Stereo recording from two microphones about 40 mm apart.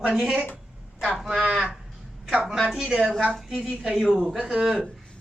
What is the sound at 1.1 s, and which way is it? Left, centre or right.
Speech, centre.